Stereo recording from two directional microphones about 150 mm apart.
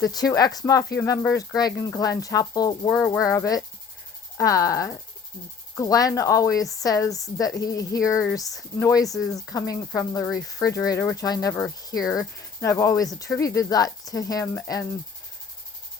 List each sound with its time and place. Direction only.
0.0 s speech: 25° left (ahead or behind)